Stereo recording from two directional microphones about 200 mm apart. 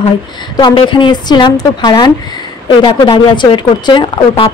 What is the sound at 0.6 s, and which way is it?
Speech, 25° left (ahead or behind).